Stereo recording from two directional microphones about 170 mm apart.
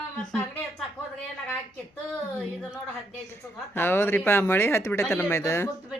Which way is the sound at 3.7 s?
15° left (ahead or behind).